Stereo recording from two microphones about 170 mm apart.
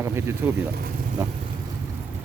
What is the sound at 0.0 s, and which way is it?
Speech, 15° right (ahead or behind).